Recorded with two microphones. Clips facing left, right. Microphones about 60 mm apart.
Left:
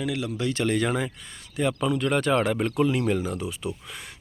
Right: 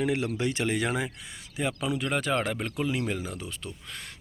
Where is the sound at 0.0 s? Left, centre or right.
Right.